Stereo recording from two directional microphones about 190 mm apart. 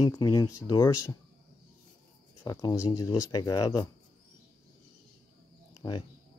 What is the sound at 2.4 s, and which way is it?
Speech, 15° left (ahead or behind).